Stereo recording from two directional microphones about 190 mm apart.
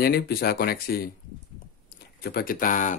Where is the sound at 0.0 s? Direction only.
55° left (ahead or behind).